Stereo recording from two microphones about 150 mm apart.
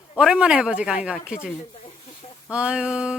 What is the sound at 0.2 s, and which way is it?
Speech, 5° right (ahead or behind).